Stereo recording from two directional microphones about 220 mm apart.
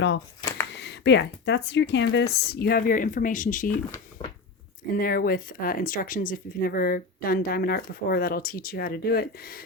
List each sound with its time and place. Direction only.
0.7 s speech: 50° left (ahead or behind)
4.2 s a sound: 20° left (ahead or behind)
4.9 s speech: 40° left (ahead or behind)